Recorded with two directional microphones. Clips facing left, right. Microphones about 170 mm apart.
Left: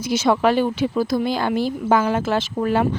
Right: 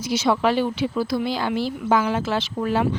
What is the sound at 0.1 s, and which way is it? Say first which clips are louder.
Speech: left 3 dB; 50° left (ahead or behind).